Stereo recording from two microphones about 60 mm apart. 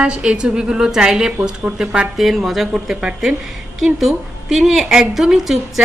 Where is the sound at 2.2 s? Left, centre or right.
Centre.